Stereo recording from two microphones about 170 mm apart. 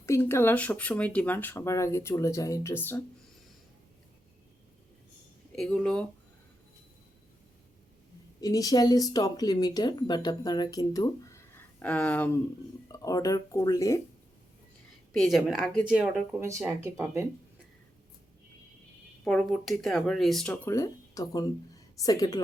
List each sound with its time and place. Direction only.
0.0 s speech: 15° left (ahead or behind)
5.5 s speech: 5° left (ahead or behind)
8.4 s speech: 20° left (ahead or behind)
12.9 s speech: 20° left (ahead or behind)
15.1 s speech: centre (ahead or behind)
16.4 s speech: 15° right (ahead or behind)
19.2 s speech: 5° left (ahead or behind)
20.7 s speech: 20° left (ahead or behind)